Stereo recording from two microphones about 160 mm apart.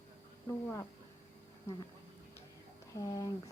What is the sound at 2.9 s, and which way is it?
Speech, 20° left (ahead or behind).